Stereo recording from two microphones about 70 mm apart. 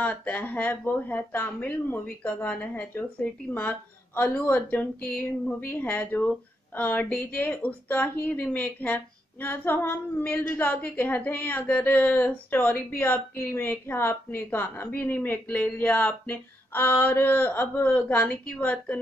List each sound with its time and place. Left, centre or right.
0.0 s speech: left